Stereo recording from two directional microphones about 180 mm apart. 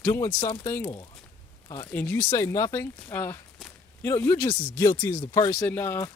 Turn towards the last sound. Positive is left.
turn(degrees=15)  # may be behind; listen again after turning